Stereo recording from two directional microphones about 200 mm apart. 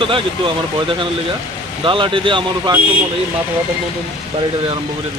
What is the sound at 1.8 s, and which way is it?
Speech, 25° right (ahead or behind).